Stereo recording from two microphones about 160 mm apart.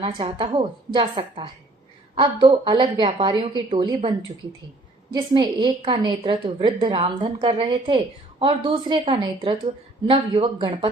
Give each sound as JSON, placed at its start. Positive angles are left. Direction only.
{"t": 0.0, "sound": "a woman's voice", "side_deg": -30}
{"t": 5.1, "sound": "a woman's voice", "side_deg": -30}